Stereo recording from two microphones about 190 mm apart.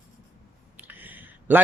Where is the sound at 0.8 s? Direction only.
10° right (ahead or behind).